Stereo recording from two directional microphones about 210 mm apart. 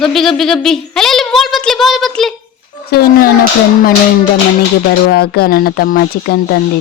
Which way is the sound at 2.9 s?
45° left (ahead or behind).